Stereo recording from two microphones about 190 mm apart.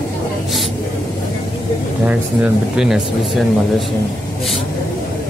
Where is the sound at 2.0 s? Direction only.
5° right (ahead or behind).